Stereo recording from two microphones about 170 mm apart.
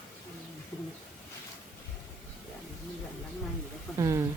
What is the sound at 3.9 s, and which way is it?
Speech, 20° right (ahead or behind).